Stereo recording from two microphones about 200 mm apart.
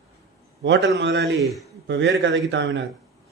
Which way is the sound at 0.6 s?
65° right (ahead or behind).